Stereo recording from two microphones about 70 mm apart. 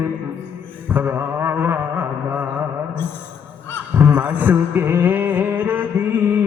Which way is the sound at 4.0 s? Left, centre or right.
Right.